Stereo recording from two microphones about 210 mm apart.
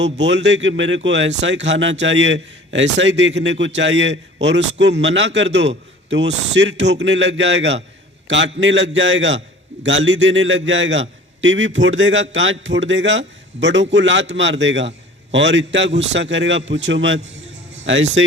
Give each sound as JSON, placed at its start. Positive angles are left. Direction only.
{"t": 0.0, "sound": "speech", "side_deg": -55}